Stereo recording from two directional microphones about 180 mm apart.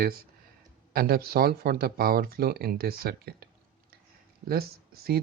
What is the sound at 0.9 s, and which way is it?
Speech, 55° right (ahead or behind).